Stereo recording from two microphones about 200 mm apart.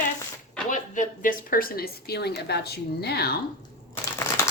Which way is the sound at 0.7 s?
40° left (ahead or behind).